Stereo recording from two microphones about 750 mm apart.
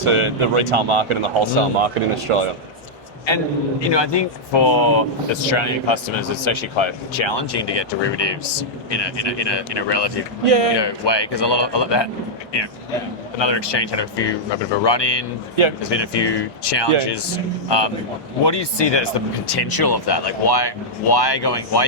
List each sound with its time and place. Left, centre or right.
0.0 s speech: right
3.2 s a man's voice: left
10.4 s speech: right
10.8 s a man's voice: left
13.4 s a man's voice: left